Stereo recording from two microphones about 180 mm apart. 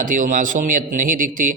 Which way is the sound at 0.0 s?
45° right (ahead or behind).